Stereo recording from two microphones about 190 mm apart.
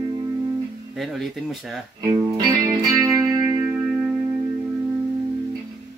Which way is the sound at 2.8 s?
15° right (ahead or behind).